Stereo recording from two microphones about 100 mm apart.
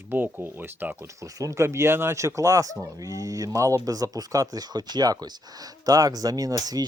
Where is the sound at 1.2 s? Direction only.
35° right (ahead or behind).